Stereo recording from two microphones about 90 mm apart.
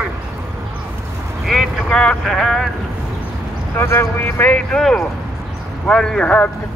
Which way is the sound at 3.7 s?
25° left (ahead or behind).